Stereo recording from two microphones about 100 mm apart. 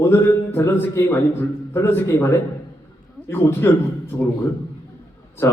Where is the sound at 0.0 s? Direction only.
25° left (ahead or behind).